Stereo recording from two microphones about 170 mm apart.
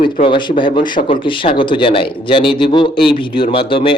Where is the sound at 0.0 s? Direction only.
30° left (ahead or behind).